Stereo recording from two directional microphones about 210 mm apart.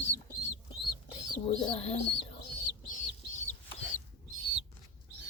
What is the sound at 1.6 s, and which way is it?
Bird, 25° left (ahead or behind).